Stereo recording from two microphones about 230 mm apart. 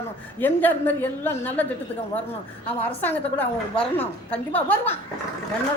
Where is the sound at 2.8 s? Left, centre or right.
Centre.